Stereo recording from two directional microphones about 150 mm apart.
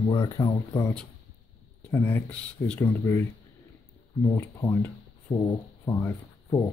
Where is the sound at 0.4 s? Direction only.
20° left (ahead or behind).